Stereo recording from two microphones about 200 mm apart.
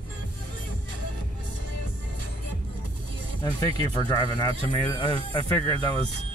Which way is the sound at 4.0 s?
20° left (ahead or behind).